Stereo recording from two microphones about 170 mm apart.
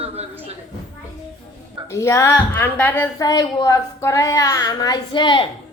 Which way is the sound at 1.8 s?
15° left (ahead or behind).